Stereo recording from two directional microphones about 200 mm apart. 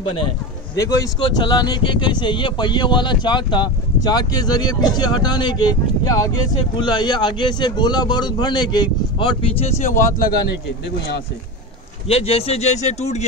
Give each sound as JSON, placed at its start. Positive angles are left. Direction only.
{"t": 0.7, "sound": "speech", "side_deg": 15}
{"t": 12.1, "sound": "speech", "side_deg": 30}